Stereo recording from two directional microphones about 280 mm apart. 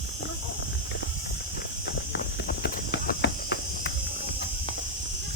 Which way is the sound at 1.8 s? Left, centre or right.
Left.